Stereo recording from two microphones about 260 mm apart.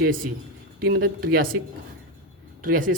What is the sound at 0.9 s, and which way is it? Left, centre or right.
Speech, right.